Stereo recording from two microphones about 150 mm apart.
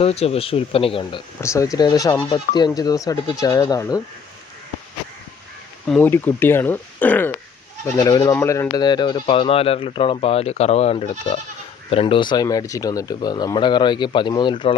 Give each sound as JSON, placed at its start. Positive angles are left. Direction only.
{"t": 0.0, "sound": "speech", "side_deg": 40}
{"t": 1.4, "sound": "speech", "side_deg": 20}
{"t": 6.0, "sound": "speech", "side_deg": 15}